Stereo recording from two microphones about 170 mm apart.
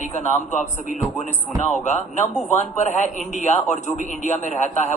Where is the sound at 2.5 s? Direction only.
45° left (ahead or behind).